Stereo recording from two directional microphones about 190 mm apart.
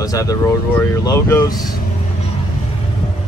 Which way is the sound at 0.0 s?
20° left (ahead or behind).